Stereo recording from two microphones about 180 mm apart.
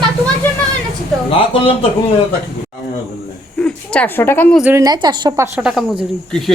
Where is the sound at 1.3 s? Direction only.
30° left (ahead or behind).